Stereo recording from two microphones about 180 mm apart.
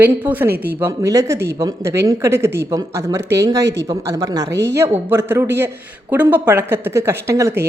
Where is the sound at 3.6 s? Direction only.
80° right.